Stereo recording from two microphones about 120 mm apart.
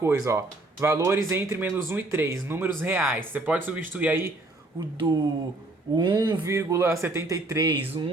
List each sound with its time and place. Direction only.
0.0 s speech: 20° right (ahead or behind)
4.9 s speech: 45° right (ahead or behind); by 7.8 s 30° right (ahead or behind)